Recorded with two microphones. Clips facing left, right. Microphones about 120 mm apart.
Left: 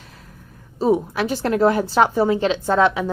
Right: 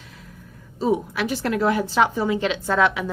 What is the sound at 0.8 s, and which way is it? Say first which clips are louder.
A woman's voice: left 3 dB; 40° left (ahead or behind).